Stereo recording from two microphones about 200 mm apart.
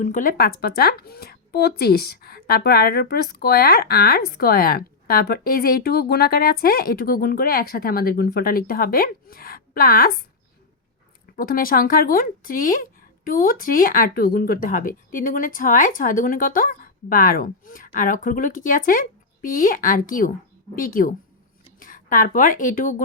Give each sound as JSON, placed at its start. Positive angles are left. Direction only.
{"t": 0.0, "sound": "speech", "side_deg": 40}
{"t": 11.3, "sound": "speech", "side_deg": 45}